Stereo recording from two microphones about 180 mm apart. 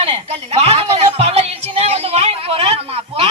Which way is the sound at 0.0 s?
35° right (ahead or behind).